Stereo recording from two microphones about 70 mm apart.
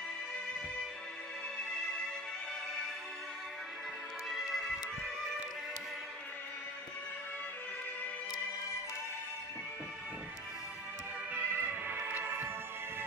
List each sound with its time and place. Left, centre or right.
4.3 s music: centre
11.3 s music: right